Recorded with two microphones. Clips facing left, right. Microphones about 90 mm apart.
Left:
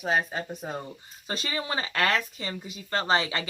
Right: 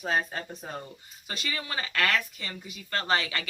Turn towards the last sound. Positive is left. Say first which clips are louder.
# left 3 dB
turn(degrees=25)  # may be behind; listen again after turning